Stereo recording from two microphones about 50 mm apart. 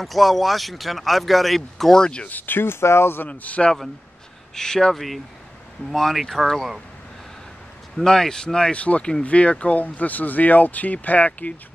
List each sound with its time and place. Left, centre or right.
0.0 s speech: centre
2.2 s speech: left
3.3 s a man's voice: left
4.6 s speech: centre
8.0 s speech: centre
8.7 s a man's voice: left